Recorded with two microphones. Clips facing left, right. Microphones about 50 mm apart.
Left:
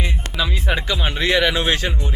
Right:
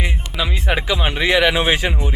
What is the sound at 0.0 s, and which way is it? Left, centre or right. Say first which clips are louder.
Music: right 1 dB; centre.